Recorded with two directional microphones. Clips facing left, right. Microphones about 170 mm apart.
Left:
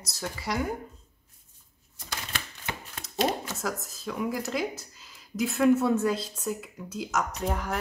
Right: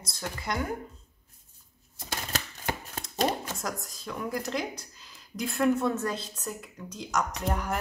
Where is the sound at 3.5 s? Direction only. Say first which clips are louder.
Left 2 dB; centre (ahead or behind).